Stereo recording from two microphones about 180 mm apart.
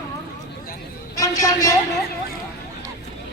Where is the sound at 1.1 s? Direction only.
20° left (ahead or behind).